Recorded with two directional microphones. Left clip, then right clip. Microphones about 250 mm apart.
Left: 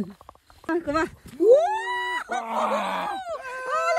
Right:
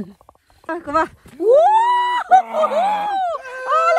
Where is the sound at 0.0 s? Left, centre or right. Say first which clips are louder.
Right 1 dB; centre.